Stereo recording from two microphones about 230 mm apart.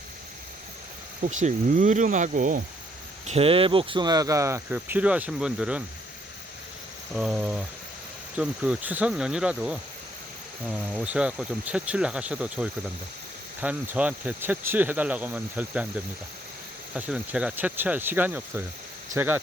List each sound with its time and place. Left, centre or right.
1.2 s speech: right; by 5.8 s centre
7.2 s speech: centre
16.9 s speech: centre